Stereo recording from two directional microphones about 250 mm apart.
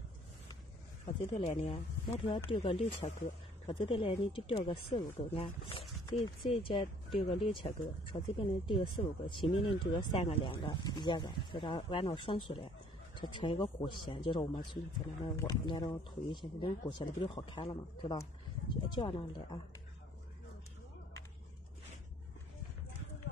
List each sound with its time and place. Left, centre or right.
1.0 s speech: left